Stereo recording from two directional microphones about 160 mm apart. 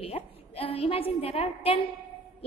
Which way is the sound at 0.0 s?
35° left (ahead or behind).